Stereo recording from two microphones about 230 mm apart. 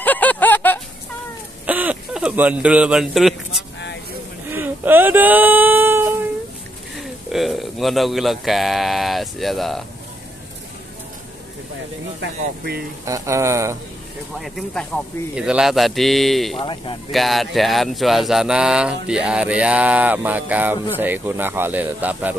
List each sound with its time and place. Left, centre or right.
0.0 s a sound: centre
1.7 s a sound: centre
7.0 s speech: centre
12.2 s speech: right
13.0 s speech: centre
14.4 s speech: centre
16.5 s speech: left
17.1 s speech: centre